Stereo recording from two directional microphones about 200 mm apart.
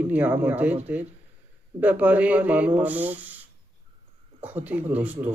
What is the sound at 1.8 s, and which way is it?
A man's voice, 10° right (ahead or behind).